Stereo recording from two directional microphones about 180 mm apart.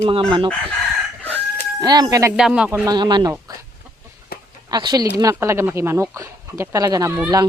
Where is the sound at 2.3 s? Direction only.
5° right (ahead or behind).